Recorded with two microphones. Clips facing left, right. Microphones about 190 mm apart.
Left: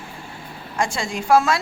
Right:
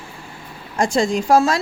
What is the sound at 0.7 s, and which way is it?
Speech, 40° right (ahead or behind).